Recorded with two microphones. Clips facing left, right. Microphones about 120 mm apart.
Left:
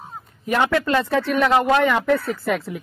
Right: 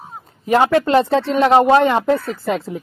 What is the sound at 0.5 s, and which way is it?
A woman's voice, 30° right (ahead or behind).